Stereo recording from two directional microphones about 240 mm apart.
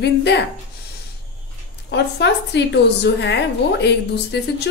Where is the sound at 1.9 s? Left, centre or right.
Left.